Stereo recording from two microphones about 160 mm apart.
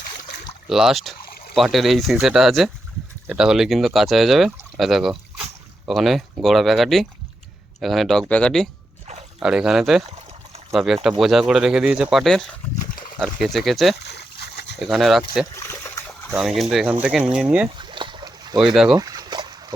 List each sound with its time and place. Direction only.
0.7 s speech: centre (ahead or behind)
12.9 s a sound: 60° left (ahead or behind)
13.1 s speech: centre (ahead or behind)
13.9 s a sound: 90° left
14.8 s speech: centre (ahead or behind)
15.5 s trickle: 15° left (ahead or behind)
16.3 s speech: 5° right (ahead or behind)
17.7 s boat: 30° right (ahead or behind)
18.6 s speech: 5° right (ahead or behind)
18.9 s a sound: 25° right (ahead or behind)